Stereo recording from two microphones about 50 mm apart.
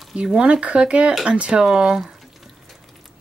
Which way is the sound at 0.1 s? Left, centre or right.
Centre.